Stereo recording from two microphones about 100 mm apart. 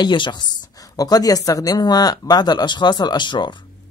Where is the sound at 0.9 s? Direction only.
40° left (ahead or behind).